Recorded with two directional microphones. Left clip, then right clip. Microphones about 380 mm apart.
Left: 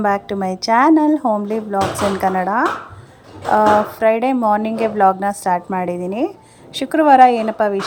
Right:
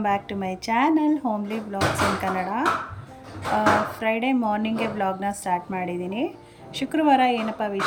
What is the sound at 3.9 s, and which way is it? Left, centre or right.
Speech, centre.